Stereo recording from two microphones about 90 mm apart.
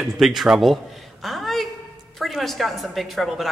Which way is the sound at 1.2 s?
Centre (ahead or behind).